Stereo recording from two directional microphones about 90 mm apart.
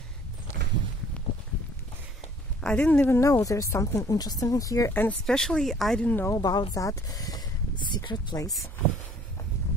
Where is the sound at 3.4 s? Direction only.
35° left (ahead or behind).